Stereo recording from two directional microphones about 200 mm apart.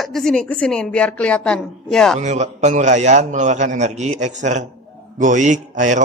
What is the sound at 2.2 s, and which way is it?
A man's voice, 35° right (ahead or behind).